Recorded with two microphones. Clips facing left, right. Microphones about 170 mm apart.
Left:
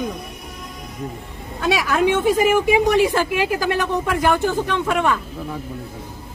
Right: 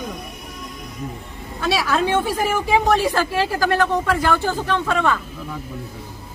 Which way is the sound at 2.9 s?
15° left (ahead or behind).